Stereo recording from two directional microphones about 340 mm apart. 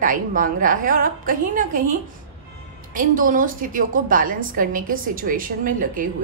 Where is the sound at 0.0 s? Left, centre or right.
Right.